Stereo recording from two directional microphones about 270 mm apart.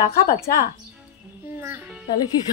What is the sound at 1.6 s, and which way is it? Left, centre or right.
Speech, centre.